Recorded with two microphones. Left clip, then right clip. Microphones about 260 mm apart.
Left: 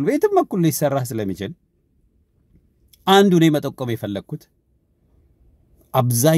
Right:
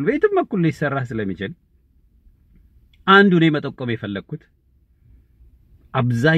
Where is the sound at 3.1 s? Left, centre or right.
Left.